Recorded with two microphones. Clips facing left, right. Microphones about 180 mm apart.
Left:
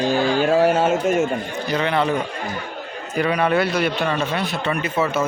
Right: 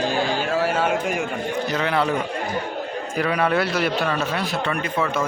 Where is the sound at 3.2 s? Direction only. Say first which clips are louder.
Left 2 dB; centre (ahead or behind).